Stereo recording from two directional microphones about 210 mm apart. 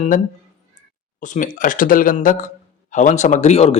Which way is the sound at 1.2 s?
40° left (ahead or behind).